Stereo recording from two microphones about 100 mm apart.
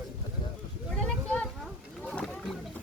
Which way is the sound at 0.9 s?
10° left (ahead or behind).